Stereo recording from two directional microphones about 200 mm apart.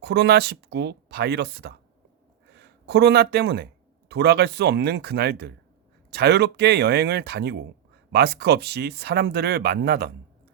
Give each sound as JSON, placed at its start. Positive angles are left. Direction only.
{"t": 0.0, "sound": "speech", "side_deg": -55}